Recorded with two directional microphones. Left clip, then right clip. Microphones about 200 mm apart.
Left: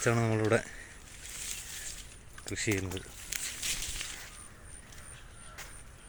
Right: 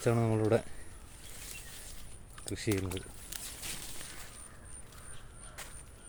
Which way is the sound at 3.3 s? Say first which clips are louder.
Left 8 dB; 35° right (ahead or behind).